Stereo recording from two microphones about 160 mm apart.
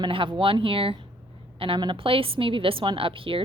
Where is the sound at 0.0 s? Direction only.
35° right (ahead or behind).